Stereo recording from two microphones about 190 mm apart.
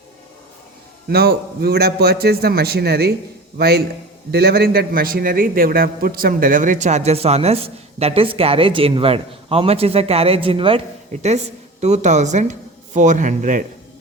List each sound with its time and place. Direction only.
1.1 s a man's voice: 55° right (ahead or behind)